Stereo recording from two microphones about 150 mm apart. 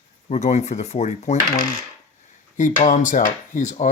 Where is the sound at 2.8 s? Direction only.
55° left (ahead or behind).